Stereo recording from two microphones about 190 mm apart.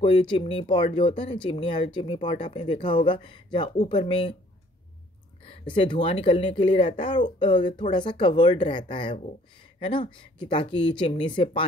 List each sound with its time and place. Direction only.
0.0 s speech: 30° left (ahead or behind)
5.5 s a sound: 25° left (ahead or behind)
5.9 s speech: 30° left (ahead or behind)